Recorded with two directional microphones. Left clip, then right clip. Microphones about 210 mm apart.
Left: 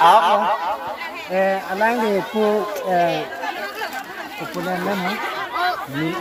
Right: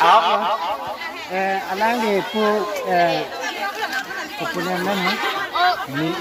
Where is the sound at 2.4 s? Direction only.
10° left (ahead or behind).